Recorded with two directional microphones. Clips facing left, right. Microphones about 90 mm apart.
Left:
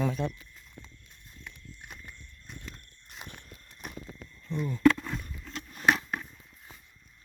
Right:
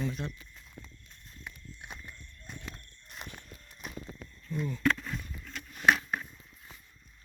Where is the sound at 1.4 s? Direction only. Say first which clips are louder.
Right 1 dB; 5° right (ahead or behind).